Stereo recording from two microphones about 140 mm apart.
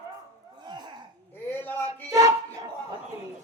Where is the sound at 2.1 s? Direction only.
25° right (ahead or behind).